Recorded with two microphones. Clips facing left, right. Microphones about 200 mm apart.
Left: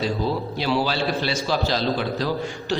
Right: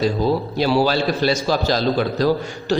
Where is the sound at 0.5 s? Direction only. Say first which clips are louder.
Right 6 dB; 40° right (ahead or behind).